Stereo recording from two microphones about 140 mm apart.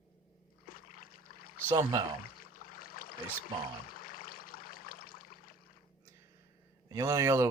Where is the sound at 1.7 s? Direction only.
25° right (ahead or behind).